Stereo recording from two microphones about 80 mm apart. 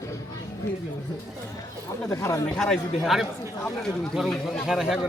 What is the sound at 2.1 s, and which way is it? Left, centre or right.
Speech, left.